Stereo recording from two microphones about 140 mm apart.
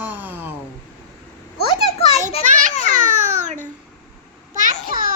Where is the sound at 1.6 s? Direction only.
45° left (ahead or behind).